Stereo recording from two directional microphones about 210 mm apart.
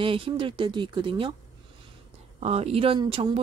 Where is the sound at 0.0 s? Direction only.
25° right (ahead or behind).